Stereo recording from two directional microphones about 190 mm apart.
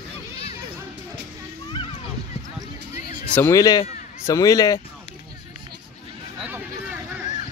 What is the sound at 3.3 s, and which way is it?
Speech, 15° left (ahead or behind).